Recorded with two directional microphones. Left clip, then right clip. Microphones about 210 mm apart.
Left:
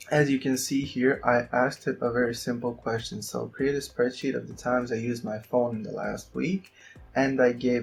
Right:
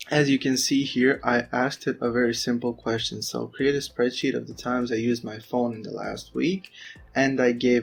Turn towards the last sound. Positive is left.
turn(degrees=-35)  # may be behind; listen again after turning